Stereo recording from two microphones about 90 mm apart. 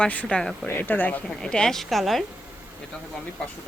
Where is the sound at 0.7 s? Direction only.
20° left (ahead or behind).